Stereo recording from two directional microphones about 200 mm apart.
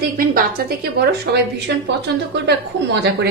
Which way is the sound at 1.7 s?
60° right (ahead or behind).